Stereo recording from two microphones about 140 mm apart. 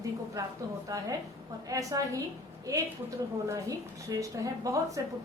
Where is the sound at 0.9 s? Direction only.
25° right (ahead or behind).